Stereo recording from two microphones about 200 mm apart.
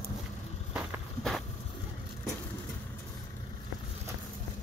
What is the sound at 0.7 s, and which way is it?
Vehicle, centre (ahead or behind).